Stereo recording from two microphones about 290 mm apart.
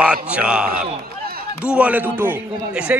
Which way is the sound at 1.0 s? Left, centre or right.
Right.